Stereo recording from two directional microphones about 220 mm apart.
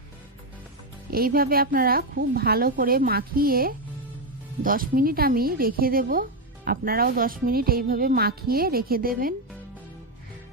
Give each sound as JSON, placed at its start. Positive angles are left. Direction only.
{"t": 1.1, "sound": "a woman's voice", "side_deg": -40}